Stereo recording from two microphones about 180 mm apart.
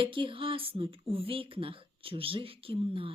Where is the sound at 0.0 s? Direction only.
30° right (ahead or behind).